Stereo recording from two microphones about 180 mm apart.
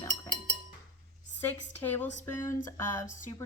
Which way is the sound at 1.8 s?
10° left (ahead or behind).